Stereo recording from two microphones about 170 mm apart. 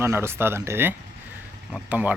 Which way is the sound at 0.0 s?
15° right (ahead or behind).